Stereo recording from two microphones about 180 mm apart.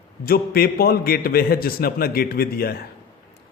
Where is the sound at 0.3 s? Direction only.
55° left (ahead or behind).